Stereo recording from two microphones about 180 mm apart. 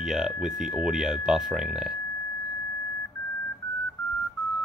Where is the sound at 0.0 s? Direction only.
5° right (ahead or behind).